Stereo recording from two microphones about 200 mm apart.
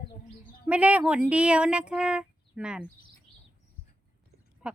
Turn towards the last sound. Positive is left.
turn(degrees=-5)  # may be behind; listen again after turning